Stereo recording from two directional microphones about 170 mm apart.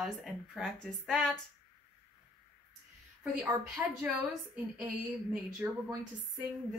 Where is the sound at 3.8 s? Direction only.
10° right (ahead or behind).